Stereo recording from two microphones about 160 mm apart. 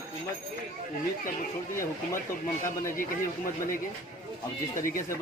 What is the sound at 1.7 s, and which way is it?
Speech, 15° left (ahead or behind).